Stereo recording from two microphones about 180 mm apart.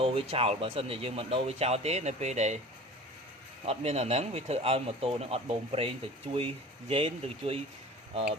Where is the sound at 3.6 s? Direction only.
35° right (ahead or behind).